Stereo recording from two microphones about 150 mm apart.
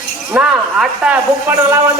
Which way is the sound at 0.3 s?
10° right (ahead or behind).